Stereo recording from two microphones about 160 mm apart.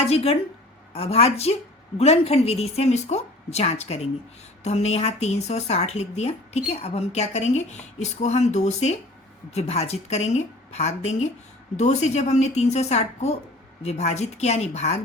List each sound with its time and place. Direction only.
0.1 s a woman's voice: 40° left (ahead or behind)